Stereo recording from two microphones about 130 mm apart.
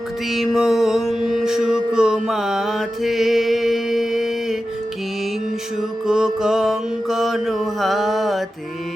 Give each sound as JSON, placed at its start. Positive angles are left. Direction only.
{"t": 0.3, "sound": "mantra", "side_deg": -5}
{"t": 6.1, "sound": "mantra", "side_deg": -5}